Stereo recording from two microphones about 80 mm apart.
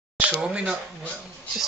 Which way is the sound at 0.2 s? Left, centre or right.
Centre.